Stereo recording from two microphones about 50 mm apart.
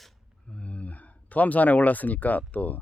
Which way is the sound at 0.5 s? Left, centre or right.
Left.